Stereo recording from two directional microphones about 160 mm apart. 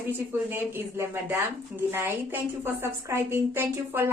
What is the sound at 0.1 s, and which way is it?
Speech, 15° right (ahead or behind).